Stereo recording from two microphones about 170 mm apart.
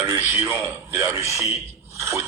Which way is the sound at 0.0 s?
15° right (ahead or behind).